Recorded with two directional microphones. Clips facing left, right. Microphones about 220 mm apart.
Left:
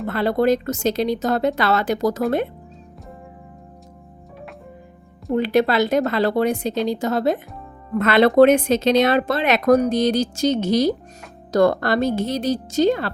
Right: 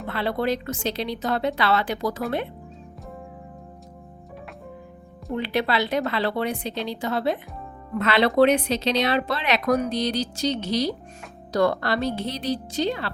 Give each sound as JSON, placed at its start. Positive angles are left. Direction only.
{"t": 0.1, "sound": "a woman's voice", "side_deg": 45}
{"t": 5.3, "sound": "a woman's voice", "side_deg": 45}